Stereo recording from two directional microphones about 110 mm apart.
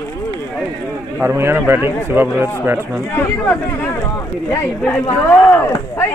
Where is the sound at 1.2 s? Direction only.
20° right (ahead or behind).